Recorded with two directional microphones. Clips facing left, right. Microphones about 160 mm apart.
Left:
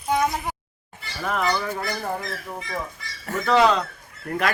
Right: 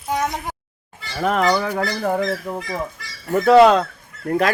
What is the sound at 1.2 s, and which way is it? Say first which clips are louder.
Fowl: right 6 dB; 85° right.